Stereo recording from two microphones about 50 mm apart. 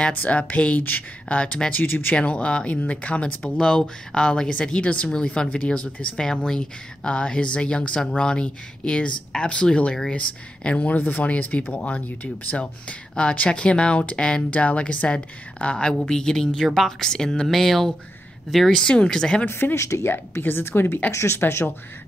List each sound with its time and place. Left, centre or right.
0.1 s speech: left
1.8 s speech: left
2.1 s speech: left
5.1 s speech: centre
11.0 s speech: left; by 19.4 s centre
19.4 s a woman's voice: left
19.8 s speech: left
20.1 s a woman's voice: left
21.1 s speech: left
21.4 s a woman's voice: left